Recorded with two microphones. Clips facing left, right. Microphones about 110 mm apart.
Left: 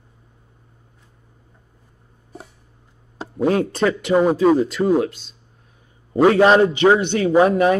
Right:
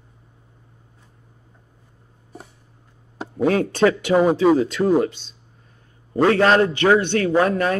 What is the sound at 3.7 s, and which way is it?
Speech, centre (ahead or behind).